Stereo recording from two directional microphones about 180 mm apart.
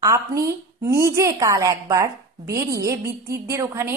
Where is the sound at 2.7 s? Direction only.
15° right (ahead or behind).